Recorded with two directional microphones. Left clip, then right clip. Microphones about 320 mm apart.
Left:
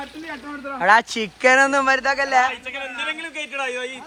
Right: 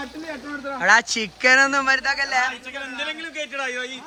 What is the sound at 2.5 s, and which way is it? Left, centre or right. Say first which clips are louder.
A man's voice: left 2 dB; centre.